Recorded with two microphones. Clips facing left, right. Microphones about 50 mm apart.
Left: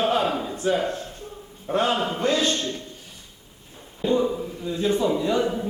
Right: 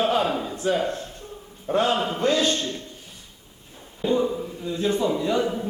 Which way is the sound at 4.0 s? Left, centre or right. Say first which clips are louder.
Left 1 dB; centre.